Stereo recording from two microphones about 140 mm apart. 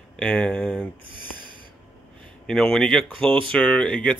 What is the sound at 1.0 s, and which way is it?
Speech, 35° right (ahead or behind).